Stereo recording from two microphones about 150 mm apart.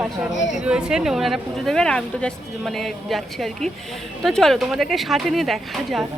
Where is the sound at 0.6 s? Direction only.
5° right (ahead or behind).